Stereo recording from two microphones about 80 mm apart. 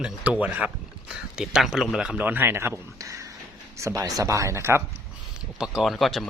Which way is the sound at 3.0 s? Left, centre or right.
Right.